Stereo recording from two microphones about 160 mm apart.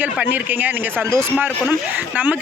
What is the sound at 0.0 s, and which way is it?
Speech, 10° right (ahead or behind).